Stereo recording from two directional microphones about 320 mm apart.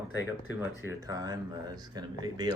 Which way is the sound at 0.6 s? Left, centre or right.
Centre.